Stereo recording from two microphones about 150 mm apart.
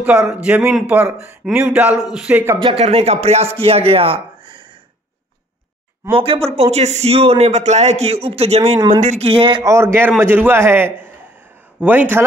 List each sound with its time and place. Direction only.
0.0 s speech: 10° right (ahead or behind)
2.6 s speech: 40° right (ahead or behind)
6.1 s speech: 40° right (ahead or behind)
8.7 s speech: 25° right (ahead or behind)
9.2 s a man's voice: 40° right (ahead or behind)
9.7 s speech: 20° right (ahead or behind)